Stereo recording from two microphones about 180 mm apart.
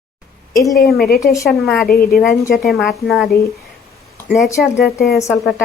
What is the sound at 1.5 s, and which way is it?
Speech, centre (ahead or behind).